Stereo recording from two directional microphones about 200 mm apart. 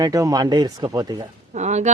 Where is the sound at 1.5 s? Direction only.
35° right (ahead or behind).